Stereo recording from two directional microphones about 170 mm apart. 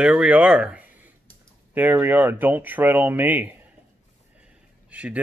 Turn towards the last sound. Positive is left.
turn(degrees=-10)  # may be behind; listen again after turning